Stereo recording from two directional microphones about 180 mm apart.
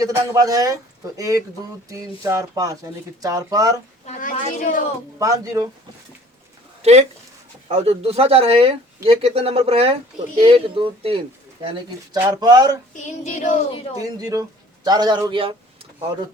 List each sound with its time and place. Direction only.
0.0 s speech: 20° right (ahead or behind)
4.0 s a woman's voice: 45° left (ahead or behind)
5.2 s speech: 20° right (ahead or behind)
6.8 s speech: 35° right (ahead or behind)
12.1 s speech: 20° right (ahead or behind)
12.9 s a woman's voice: 45° left (ahead or behind)
13.7 s speech: 30° left (ahead or behind)
14.0 s speech: 20° right (ahead or behind)